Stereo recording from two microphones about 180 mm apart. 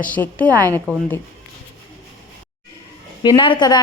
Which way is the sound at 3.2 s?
25° left (ahead or behind).